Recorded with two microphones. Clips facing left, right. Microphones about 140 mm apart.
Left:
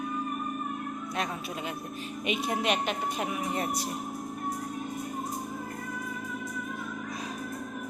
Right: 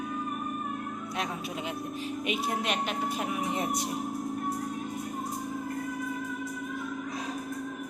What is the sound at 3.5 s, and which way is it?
Speech, 20° right (ahead or behind).